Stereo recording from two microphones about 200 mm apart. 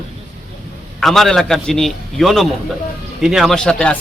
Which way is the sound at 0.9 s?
Centre (ahead or behind).